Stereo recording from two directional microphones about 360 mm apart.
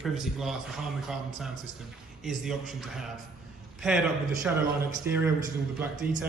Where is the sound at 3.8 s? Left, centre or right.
Centre.